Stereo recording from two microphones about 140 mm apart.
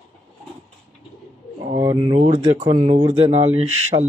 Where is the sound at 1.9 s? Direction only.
50° right (ahead or behind).